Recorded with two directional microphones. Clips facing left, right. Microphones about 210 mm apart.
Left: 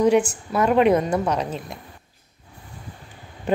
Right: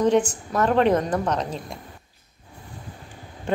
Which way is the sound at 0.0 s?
10° left (ahead or behind).